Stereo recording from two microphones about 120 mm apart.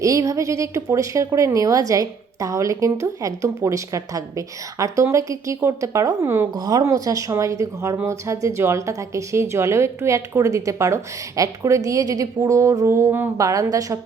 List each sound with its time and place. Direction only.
0.0 s a woman's voice: 25° right (ahead or behind)
6.5 s a woman's voice: 35° right (ahead or behind)